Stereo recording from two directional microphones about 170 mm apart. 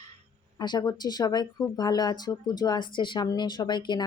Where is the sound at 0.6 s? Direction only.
25° left (ahead or behind).